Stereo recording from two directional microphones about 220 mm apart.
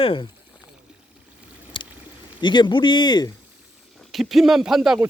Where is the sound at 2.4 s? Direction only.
20° left (ahead or behind).